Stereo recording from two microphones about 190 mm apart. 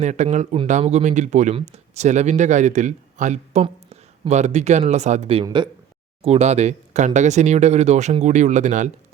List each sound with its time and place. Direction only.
0.0 s speech: 40° right (ahead or behind)